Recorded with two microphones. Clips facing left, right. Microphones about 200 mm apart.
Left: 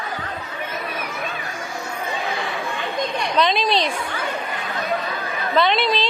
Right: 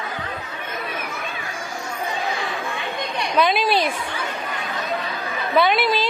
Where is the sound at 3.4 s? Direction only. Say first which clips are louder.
Right 1 dB; 5° right (ahead or behind).